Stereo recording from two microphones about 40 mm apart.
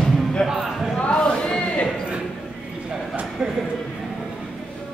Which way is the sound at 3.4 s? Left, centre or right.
Centre.